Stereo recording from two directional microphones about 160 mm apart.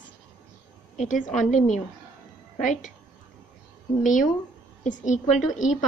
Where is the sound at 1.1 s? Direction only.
50° left (ahead or behind).